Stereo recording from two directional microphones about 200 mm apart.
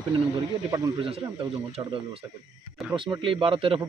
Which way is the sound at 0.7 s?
25° right (ahead or behind).